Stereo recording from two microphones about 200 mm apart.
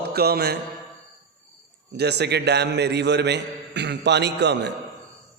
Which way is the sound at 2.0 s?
55° right (ahead or behind).